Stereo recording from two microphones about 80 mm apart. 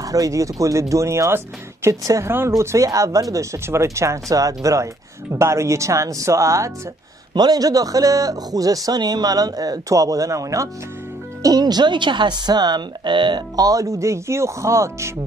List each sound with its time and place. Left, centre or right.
0.0 s speech: right
7.3 s a man's voice: right
11.4 s speech: right
13.6 s speech: right